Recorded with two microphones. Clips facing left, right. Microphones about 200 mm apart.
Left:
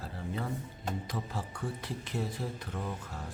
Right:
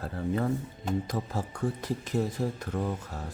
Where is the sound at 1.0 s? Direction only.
40° right (ahead or behind).